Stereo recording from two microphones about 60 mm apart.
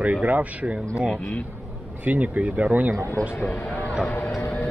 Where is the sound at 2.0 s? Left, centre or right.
Right.